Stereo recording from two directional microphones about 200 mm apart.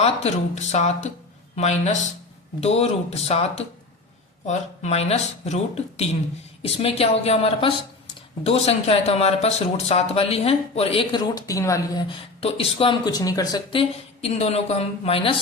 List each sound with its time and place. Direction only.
0.0 s speech: 35° left (ahead or behind)